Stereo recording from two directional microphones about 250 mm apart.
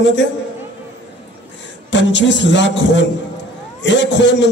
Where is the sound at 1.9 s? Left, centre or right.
Left.